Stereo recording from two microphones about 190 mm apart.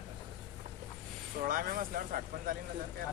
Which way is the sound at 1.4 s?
45° right (ahead or behind).